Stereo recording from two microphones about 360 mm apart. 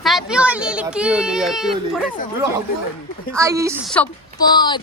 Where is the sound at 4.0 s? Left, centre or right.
Centre.